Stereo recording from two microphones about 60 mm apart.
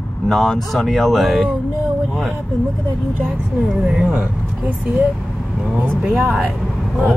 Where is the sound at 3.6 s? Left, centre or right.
Centre.